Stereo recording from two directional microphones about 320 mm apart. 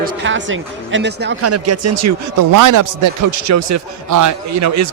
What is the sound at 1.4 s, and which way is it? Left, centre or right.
Speech, right.